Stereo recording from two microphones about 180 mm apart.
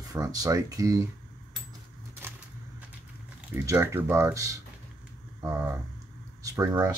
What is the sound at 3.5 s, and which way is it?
Speech, 15° right (ahead or behind).